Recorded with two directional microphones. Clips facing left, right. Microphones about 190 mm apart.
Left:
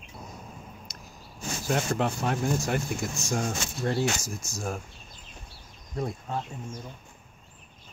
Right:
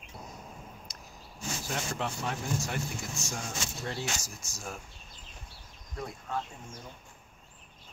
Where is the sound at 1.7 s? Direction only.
55° left (ahead or behind).